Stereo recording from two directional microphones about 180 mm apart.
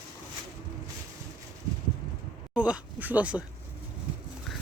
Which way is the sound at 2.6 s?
5° right (ahead or behind).